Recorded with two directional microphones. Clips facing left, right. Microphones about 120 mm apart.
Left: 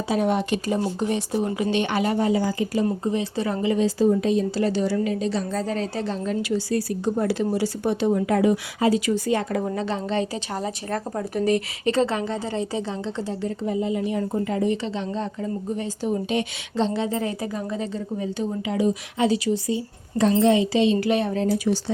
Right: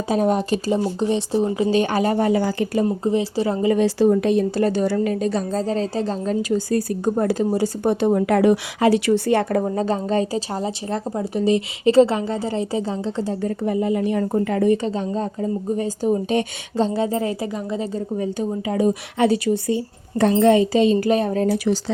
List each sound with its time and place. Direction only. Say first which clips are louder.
0.1 s speech: right 3 dB; 40° right (ahead or behind)
0.7 s a woman's voice: right 4 dB; 20° right (ahead or behind)
1.7 s a woman's voice: right 3 dB; 40° right (ahead or behind); by 2.6 s 65° right (ahead or behind)
2.8 s a woman's voice: right 4 dB; 30° right (ahead or behind)
3.8 s a woman's voice: right 1 dB; 70° right (ahead or behind); by 10.4 s 40° right (ahead or behind)
10.5 s a woman's voice: right 3 dB; 25° right (ahead or behind); by 13.5 s 40° right (ahead or behind)
13.7 s a woman's voice: right 4 dB; 55° right (ahead or behind); by 17.8 s 25° right (ahead or behind)
17.9 s a woman's voice: right 4 dB; 45° right (ahead or behind)
21.5 s speech: right 2 dB; 80° right